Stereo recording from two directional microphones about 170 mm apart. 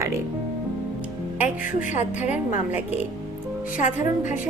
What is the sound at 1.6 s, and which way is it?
Music, 50° left (ahead or behind).